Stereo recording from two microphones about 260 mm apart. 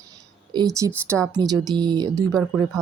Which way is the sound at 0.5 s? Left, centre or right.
Centre.